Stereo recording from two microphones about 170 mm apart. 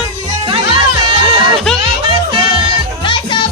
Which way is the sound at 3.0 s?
30° left (ahead or behind).